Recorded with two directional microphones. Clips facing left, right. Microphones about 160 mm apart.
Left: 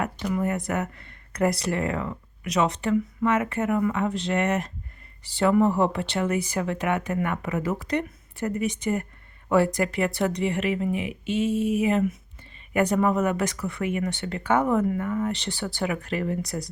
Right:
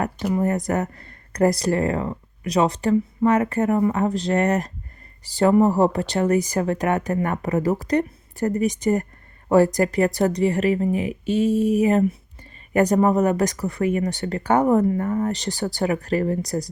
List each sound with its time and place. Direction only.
0.0 s speech: 35° right (ahead or behind)